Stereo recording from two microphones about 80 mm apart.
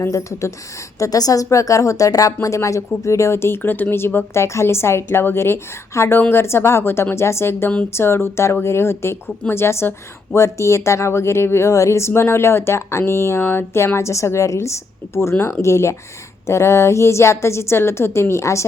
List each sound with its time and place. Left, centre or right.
0.1 s a woman's voice: left